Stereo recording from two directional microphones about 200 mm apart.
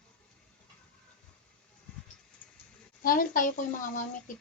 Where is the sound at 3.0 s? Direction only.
45° left (ahead or behind).